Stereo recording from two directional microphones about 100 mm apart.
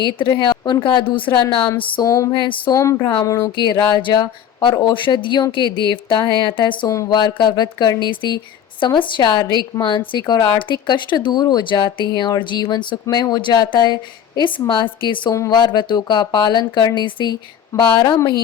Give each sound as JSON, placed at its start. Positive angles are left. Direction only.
{"t": 0.0, "sound": "a woman's voice", "side_deg": 55}
{"t": 2.0, "sound": "speech", "side_deg": 35}
{"t": 2.3, "sound": "a woman's voice", "side_deg": 55}
{"t": 2.7, "sound": "speech", "side_deg": 30}
{"t": 3.6, "sound": "a woman's voice", "side_deg": 50}
{"t": 6.8, "sound": "speech", "side_deg": 30}
{"t": 7.1, "sound": "speech", "side_deg": 50}
{"t": 15.3, "sound": "speech", "side_deg": 40}
{"t": 17.7, "sound": "speech", "side_deg": 30}